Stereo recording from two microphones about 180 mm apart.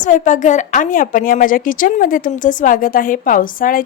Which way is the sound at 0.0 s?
45° left (ahead or behind).